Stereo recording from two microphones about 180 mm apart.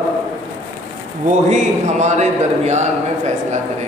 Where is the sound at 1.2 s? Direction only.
40° right (ahead or behind).